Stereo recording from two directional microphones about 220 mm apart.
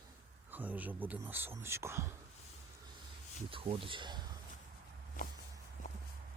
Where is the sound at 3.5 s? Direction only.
25° right (ahead or behind).